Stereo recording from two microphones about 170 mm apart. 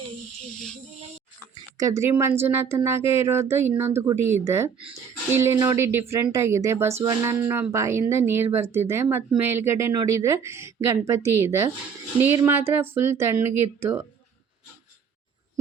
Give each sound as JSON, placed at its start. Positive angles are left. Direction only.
{"t": 1.8, "sound": "speech", "side_deg": -20}